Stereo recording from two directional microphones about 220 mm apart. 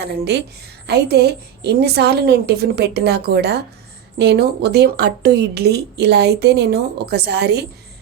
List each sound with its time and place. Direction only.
0.0 s speech: 50° right (ahead or behind)